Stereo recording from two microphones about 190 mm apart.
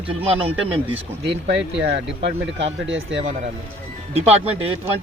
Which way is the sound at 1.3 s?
60° right (ahead or behind).